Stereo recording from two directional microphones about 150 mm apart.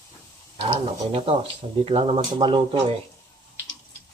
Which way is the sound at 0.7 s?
35° right (ahead or behind).